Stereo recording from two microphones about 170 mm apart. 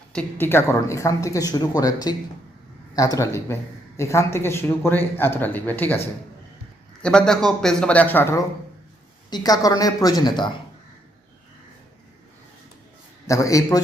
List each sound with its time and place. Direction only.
0.1 s speech: 10° left (ahead or behind)
7.0 s a man's voice: 5° left (ahead or behind); by 10.5 s 25° left (ahead or behind)
13.2 s speech: 20° left (ahead or behind)